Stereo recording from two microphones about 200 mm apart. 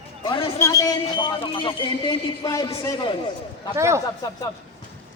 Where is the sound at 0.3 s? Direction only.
15° left (ahead or behind).